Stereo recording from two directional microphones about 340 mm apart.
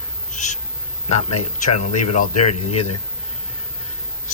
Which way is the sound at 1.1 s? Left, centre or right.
Centre.